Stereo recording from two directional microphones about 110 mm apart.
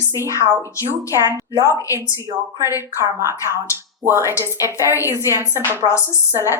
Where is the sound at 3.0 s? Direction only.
25° right (ahead or behind).